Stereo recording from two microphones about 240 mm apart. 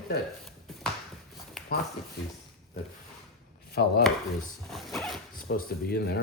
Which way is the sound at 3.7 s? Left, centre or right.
Left.